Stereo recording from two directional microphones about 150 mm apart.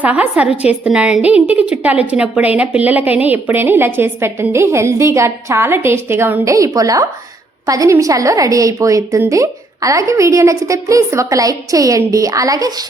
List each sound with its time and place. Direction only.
0.0 s a woman's voice: 10° right (ahead or behind)